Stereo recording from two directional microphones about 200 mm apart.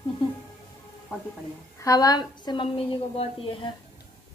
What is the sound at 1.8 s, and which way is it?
A woman's voice, 15° left (ahead or behind).